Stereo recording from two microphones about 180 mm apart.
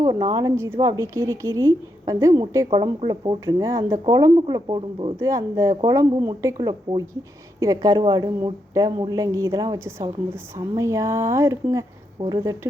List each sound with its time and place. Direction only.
0.0 s a woman's voice: 20° right (ahead or behind)